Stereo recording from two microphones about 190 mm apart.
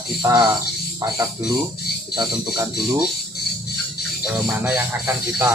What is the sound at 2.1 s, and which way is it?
Speech, 25° right (ahead or behind).